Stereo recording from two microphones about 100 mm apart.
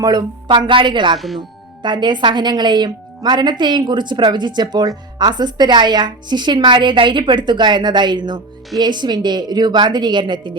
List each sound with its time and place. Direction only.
0.0 s speech: 40° right (ahead or behind)